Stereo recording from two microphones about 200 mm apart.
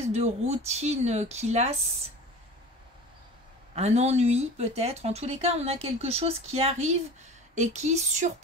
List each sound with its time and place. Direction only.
0.0 s speech: 35° right (ahead or behind)
3.7 s speech: 35° right (ahead or behind)